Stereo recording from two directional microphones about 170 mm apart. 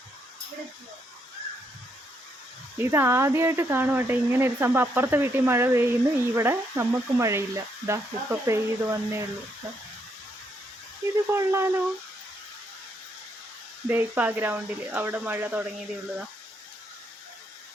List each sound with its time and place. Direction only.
2.7 s speech: 15° right (ahead or behind)
11.3 s speech: 15° right (ahead or behind)
13.8 s speech: 10° right (ahead or behind)